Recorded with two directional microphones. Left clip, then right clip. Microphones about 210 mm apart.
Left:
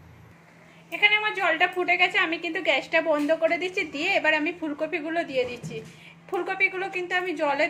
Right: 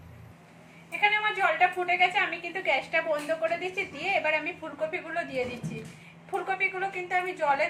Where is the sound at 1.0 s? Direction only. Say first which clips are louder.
Left 3 dB; 45° left (ahead or behind).